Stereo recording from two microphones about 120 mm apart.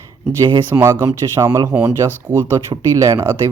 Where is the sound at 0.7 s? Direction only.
25° right (ahead or behind).